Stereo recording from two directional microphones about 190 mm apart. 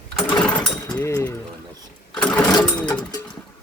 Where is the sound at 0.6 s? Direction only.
20° left (ahead or behind).